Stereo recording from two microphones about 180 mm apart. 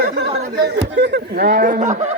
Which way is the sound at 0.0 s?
55° right (ahead or behind).